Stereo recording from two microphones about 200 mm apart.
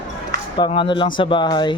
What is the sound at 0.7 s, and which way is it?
A man's voice, 25° left (ahead or behind).